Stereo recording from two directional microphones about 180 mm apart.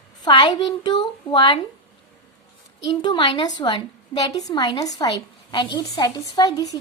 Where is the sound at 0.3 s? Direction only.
25° left (ahead or behind).